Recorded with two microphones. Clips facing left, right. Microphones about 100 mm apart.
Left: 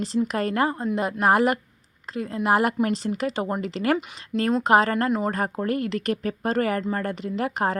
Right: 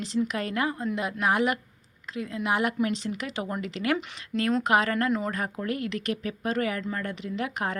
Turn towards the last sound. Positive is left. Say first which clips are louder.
# left 5 dB
turn(degrees=40)  # may be behind; listen again after turning